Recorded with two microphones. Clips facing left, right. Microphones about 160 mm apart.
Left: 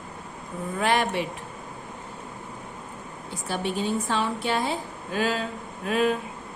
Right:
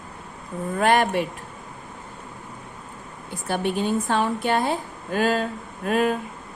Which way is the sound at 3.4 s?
55° right (ahead or behind).